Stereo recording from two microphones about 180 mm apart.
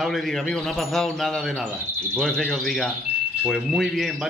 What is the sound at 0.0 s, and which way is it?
A man's voice, centre (ahead or behind).